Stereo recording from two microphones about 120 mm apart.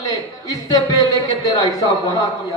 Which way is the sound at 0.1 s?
30° left (ahead or behind).